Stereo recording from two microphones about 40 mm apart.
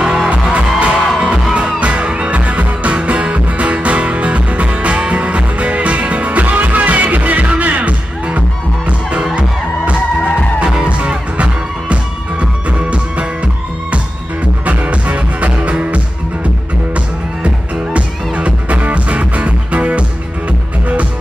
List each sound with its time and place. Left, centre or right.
0.0 s music: centre
0.3 s music: right
10.8 s music: right
14.6 s music: right
17.9 s music: right